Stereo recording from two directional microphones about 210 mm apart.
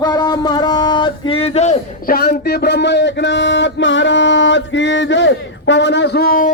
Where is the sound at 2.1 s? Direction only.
45° left (ahead or behind).